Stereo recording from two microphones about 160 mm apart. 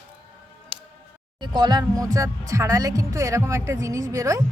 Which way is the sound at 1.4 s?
25° right (ahead or behind).